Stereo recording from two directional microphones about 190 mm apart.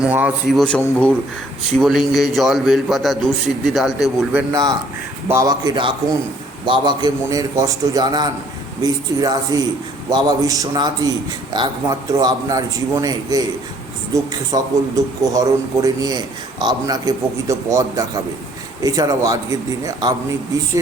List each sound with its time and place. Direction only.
0.0 s a man's voice: 5° right (ahead or behind)
5.3 s a man's voice: 20° right (ahead or behind)
14.5 s a man's voice: 20° right (ahead or behind)